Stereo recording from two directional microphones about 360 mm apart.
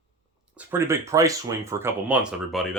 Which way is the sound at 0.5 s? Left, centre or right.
Centre.